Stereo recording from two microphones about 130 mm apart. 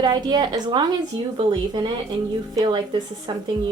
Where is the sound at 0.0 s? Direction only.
35° right (ahead or behind).